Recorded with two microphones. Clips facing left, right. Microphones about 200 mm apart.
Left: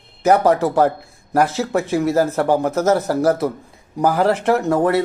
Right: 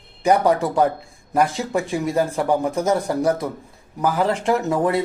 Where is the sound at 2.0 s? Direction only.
70° left (ahead or behind).